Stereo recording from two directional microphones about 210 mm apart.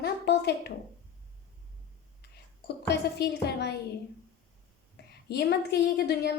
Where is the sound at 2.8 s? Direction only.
50° left (ahead or behind).